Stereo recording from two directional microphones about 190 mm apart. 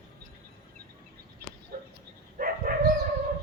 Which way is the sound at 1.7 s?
50° right (ahead or behind).